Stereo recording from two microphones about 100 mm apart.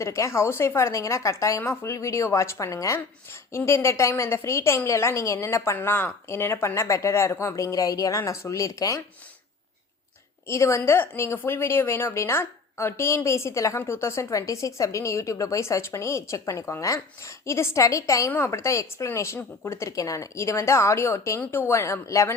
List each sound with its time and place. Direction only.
0.0 s a woman's voice: 30° left (ahead or behind)
10.4 s a woman's voice: 30° left (ahead or behind)